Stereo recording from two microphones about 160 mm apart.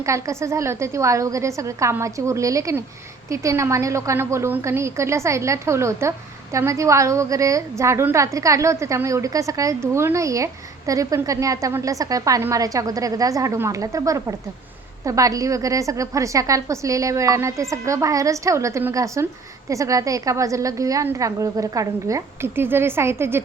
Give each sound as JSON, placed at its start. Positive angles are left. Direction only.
{"t": 0.0, "sound": "a woman's voice", "side_deg": -20}